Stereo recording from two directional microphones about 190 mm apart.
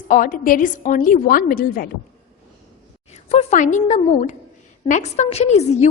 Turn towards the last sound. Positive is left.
turn(degrees=35)  # may be behind; listen again after turning